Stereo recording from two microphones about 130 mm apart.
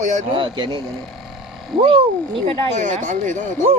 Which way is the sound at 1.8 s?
45° right (ahead or behind).